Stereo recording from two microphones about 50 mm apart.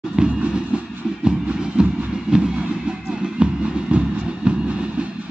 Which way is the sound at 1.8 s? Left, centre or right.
Centre.